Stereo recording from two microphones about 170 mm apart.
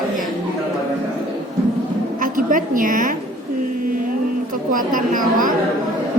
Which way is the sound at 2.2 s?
50° right (ahead or behind).